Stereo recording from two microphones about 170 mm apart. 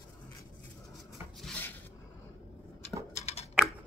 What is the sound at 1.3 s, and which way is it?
Dishes, centre (ahead or behind).